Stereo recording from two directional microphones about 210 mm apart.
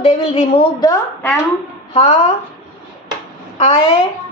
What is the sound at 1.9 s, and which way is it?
Speech, 30° left (ahead or behind).